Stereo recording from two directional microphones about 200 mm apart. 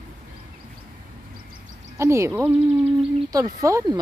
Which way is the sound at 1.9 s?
15° right (ahead or behind).